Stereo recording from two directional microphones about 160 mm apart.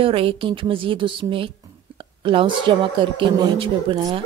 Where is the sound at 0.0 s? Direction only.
35° right (ahead or behind).